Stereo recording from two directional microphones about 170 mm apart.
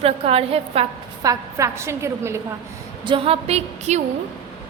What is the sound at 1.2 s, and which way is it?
A woman's voice, 20° right (ahead or behind).